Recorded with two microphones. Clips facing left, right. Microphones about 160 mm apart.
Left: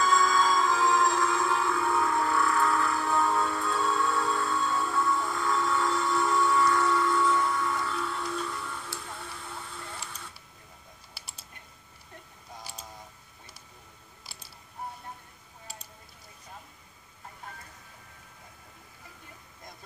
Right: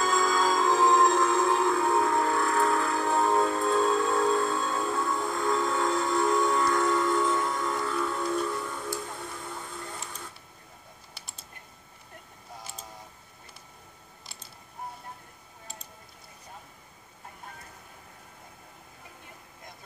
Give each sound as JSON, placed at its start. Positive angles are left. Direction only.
{"t": 0.0, "sound": "music", "side_deg": -45}